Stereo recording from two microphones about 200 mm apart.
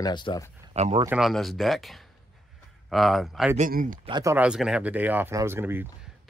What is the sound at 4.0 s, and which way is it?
Speech, 20° right (ahead or behind).